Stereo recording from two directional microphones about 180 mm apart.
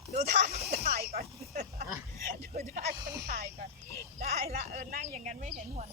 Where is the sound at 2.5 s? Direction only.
40° right (ahead or behind).